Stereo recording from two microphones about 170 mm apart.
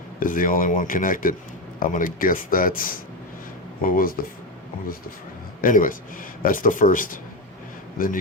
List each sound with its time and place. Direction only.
0.2 s speech: 55° left (ahead or behind)
5.6 s speech: 55° left (ahead or behind)